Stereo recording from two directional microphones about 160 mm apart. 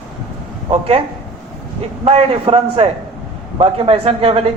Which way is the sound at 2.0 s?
40° right (ahead or behind).